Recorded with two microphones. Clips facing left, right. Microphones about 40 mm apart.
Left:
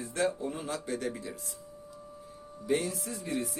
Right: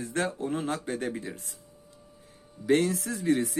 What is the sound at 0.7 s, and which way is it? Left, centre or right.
Speech, right.